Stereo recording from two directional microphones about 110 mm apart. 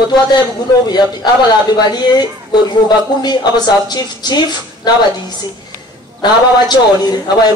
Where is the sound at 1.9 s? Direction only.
40° left (ahead or behind).